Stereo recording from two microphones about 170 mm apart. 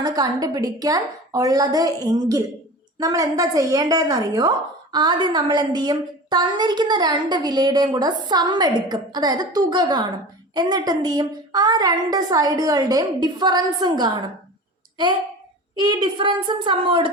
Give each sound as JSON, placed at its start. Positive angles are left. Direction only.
{"t": 0.0, "sound": "a woman's voice", "side_deg": -20}
{"t": 15.8, "sound": "a woman's voice", "side_deg": -25}